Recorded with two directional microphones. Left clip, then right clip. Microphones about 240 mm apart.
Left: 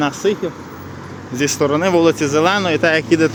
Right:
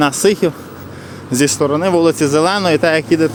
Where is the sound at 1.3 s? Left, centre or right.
Centre.